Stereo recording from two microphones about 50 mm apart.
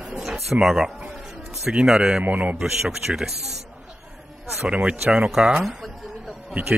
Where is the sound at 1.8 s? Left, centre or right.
Centre.